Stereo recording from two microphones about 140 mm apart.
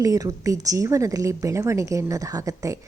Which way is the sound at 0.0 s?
25° right (ahead or behind).